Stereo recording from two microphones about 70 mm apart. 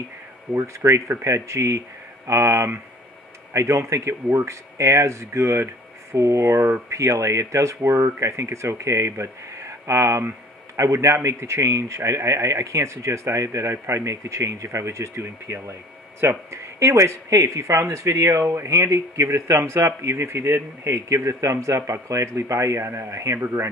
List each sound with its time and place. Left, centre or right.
0.5 s speech: right